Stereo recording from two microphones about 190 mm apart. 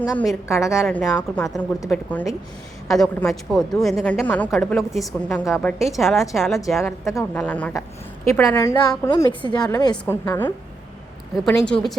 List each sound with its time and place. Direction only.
0.2 s a woman's voice: 10° left (ahead or behind)
0.7 s a woman's voice: 5° right (ahead or behind)
0.9 s a woman's voice: 10° left (ahead or behind)
7.1 s a woman's voice: 15° left (ahead or behind)